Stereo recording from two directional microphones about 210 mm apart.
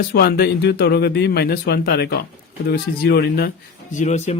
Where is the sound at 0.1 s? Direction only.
50° left (ahead or behind).